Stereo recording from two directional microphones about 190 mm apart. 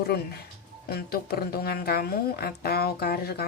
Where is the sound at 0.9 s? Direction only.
55° left (ahead or behind).